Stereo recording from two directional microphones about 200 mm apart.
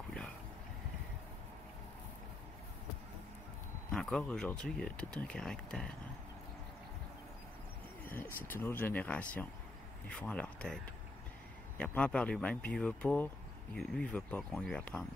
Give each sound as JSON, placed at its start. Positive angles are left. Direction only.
{"t": 3.9, "sound": "speech", "side_deg": 5}
{"t": 8.0, "sound": "speech", "side_deg": 10}
{"t": 11.8, "sound": "speech", "side_deg": 5}